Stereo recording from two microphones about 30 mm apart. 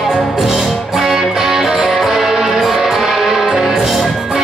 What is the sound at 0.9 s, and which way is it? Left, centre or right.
Music, centre.